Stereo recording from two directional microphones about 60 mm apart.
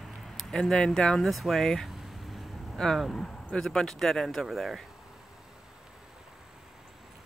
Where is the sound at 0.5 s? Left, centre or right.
Centre.